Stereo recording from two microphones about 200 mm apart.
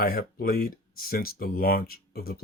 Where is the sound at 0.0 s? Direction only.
50° left (ahead or behind).